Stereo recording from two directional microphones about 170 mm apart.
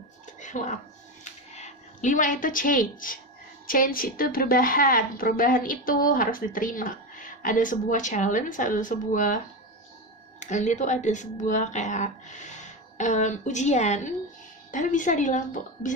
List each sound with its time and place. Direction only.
0.4 s a sound: 45° left (ahead or behind)
1.5 s a woman's voice: 45° left (ahead or behind)
10.4 s a woman's voice: 45° left (ahead or behind)